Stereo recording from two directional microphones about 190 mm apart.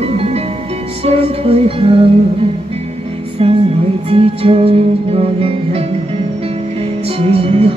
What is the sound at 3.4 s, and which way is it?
Music, 30° right (ahead or behind).